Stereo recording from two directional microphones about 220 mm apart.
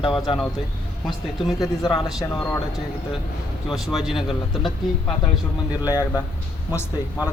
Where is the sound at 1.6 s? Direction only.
20° left (ahead or behind).